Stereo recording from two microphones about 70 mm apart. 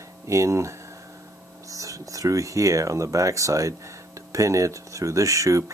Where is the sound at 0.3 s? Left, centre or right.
Right.